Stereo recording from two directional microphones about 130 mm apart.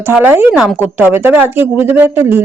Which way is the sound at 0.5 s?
5° right (ahead or behind).